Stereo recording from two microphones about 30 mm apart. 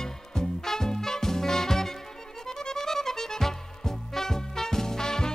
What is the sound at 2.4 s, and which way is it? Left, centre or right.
Music, centre.